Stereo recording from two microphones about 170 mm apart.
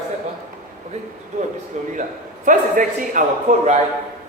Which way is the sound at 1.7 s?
45° right (ahead or behind).